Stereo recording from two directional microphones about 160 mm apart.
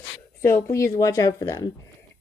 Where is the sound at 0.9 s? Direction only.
20° left (ahead or behind).